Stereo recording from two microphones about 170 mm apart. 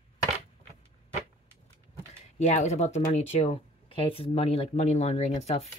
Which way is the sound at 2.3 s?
40° left (ahead or behind).